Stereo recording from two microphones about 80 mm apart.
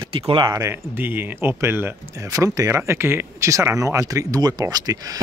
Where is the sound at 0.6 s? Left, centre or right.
Right.